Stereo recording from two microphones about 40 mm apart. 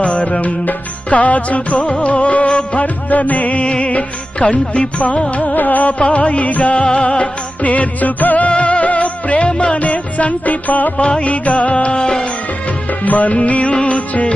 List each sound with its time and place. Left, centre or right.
0.0 s music: left
8.4 s music: left
12.9 s music: left
13.7 s music: left
14.1 s music: left